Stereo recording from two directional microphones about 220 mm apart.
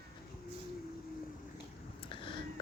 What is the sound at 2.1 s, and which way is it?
Vehicle, 25° left (ahead or behind).